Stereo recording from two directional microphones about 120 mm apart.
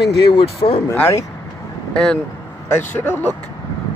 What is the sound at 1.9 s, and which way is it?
Speech, 5° left (ahead or behind).